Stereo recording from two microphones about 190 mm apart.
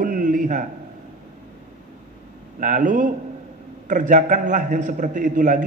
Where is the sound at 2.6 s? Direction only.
45° right (ahead or behind).